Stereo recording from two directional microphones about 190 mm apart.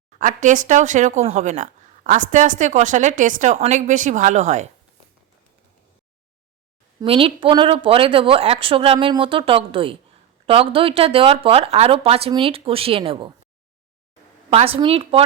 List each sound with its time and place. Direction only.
0.2 s speech: 40° right (ahead or behind)
7.0 s a woman's voice: 30° right (ahead or behind)
14.5 s a woman's voice: 30° right (ahead or behind)